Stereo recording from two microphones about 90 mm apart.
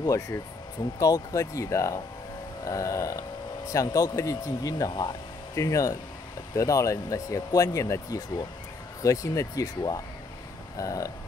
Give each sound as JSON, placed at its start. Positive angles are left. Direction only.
{"t": 0.0, "sound": "speech", "side_deg": 35}